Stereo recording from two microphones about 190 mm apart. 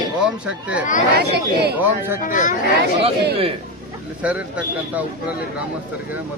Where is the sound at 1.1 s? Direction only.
60° right (ahead or behind).